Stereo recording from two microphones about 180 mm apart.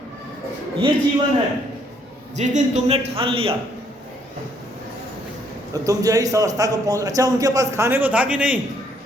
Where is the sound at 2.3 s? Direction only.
40° right (ahead or behind).